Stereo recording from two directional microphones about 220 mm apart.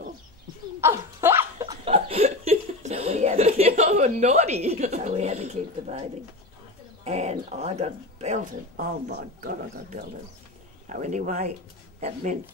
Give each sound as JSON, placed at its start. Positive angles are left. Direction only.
{"t": 0.7, "sound": "laughter", "side_deg": -10}
{"t": 7.1, "sound": "speech", "side_deg": -30}